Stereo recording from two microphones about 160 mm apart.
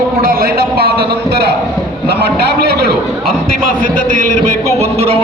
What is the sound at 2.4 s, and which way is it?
Speech, 90° right.